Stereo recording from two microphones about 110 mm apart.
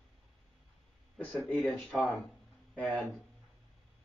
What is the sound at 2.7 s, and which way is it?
Speech, 15° left (ahead or behind).